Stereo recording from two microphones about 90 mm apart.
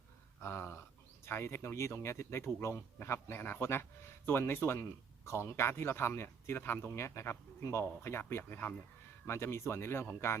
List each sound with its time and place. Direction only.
0.4 s speech: 25° left (ahead or behind)